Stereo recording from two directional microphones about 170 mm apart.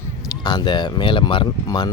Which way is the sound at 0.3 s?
25° left (ahead or behind).